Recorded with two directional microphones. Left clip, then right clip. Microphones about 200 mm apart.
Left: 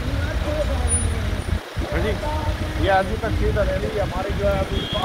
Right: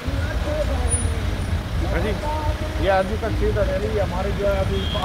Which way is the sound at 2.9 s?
50° right (ahead or behind).